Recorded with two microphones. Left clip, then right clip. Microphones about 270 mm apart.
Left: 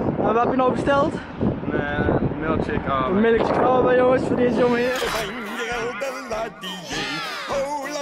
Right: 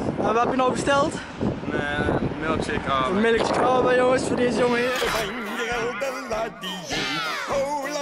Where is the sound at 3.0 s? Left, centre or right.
Centre.